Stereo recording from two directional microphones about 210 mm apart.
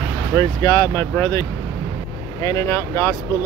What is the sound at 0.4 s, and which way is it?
Speech, 20° left (ahead or behind).